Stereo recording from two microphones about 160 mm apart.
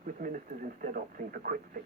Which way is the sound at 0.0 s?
60° right (ahead or behind).